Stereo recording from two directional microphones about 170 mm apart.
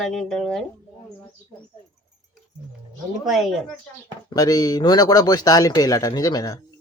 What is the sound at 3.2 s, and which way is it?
Speech, centre (ahead or behind).